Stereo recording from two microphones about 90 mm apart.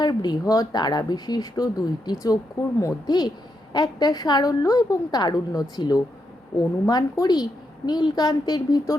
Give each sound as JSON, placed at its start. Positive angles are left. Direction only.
{"t": 0.0, "sound": "a woman's voice", "side_deg": 50}